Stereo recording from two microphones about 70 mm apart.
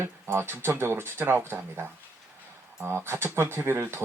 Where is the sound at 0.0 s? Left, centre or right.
Right.